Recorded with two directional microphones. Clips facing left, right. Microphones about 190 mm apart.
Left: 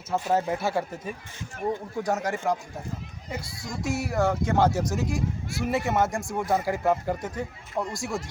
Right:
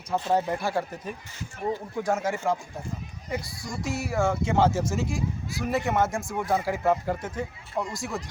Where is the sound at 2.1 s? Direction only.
Centre (ahead or behind).